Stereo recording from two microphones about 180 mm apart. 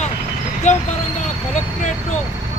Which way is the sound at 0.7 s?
40° left (ahead or behind).